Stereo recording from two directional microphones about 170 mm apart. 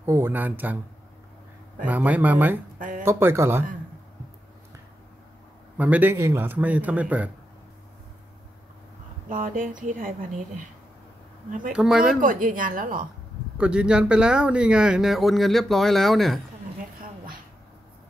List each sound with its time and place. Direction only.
0.0 s a man's voice: 15° right (ahead or behind)
1.9 s a man's voice: 10° right (ahead or behind)
5.8 s a man's voice: 10° right (ahead or behind)
9.3 s speech: 50° right (ahead or behind)
11.7 s speech: 5° right (ahead or behind)
12.2 s speech: 50° right (ahead or behind)
13.6 s speech: 5° right (ahead or behind)